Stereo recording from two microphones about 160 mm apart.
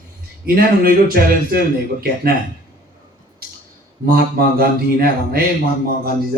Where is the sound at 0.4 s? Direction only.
70° right (ahead or behind).